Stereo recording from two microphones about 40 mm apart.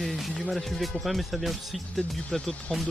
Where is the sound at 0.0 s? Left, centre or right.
Centre.